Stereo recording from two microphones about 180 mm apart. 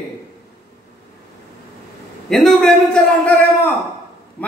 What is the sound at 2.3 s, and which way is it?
A man's voice, centre (ahead or behind).